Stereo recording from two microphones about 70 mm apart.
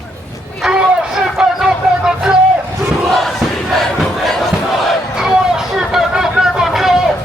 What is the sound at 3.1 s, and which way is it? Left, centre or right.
Crowd, centre.